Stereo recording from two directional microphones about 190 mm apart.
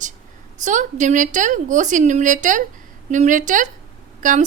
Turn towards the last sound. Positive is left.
turn(degrees=-45)  # may be behind; listen again after turning